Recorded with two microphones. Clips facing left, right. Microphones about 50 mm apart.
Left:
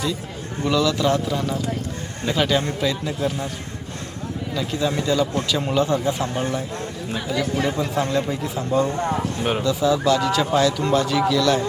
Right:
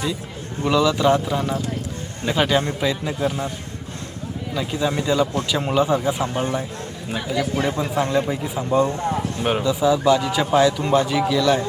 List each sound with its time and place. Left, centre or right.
0.6 s speech: centre
4.5 s speech: centre
8.9 s speech: left
9.4 s speech: centre